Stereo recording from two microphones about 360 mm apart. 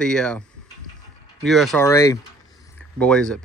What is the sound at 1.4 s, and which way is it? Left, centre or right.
Speech, centre.